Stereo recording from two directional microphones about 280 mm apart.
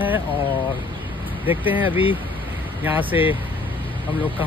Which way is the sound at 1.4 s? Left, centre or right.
Centre.